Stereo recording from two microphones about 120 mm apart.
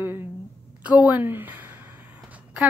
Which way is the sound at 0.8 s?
10° right (ahead or behind).